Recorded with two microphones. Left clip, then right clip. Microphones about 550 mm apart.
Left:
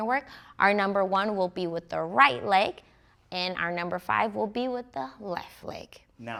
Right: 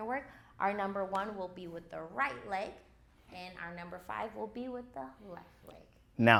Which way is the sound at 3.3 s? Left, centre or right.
Left.